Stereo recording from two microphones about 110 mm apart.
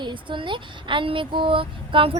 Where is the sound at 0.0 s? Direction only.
50° right (ahead or behind).